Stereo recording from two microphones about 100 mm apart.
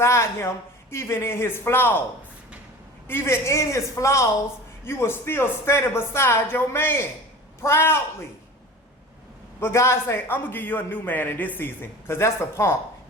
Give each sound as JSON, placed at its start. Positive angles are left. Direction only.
{"t": 0.0, "sound": "a man's voice", "side_deg": 30}
{"t": 3.1, "sound": "a man's voice", "side_deg": 25}
{"t": 9.6, "sound": "a man's voice", "side_deg": 25}